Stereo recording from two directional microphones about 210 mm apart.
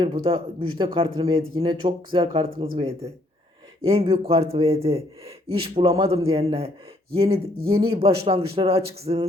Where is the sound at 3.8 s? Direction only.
25° right (ahead or behind).